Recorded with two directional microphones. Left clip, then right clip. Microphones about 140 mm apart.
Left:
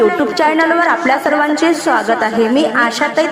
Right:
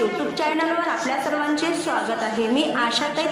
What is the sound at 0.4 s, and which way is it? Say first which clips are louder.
A woman's voice: left 10 dB; 60° left (ahead or behind).